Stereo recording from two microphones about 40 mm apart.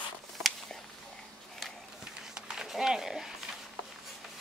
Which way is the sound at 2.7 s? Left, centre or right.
Centre.